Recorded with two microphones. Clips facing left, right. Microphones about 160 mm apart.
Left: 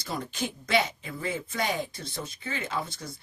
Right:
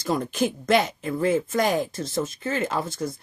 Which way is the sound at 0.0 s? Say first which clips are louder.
Right 9 dB; 50° right (ahead or behind).